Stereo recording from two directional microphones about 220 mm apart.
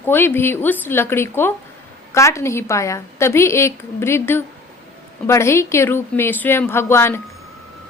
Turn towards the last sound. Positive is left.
turn(degrees=10)  # may be behind; listen again after turning